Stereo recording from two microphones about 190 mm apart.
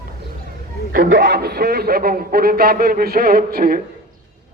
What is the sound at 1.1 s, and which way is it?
Speech, 65° right (ahead or behind).